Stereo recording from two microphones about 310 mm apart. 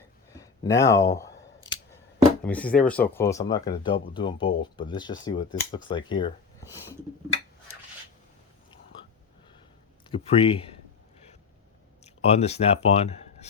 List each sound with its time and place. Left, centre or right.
0.3 s speech: centre
10.1 s speech: centre
12.0 s speech: centre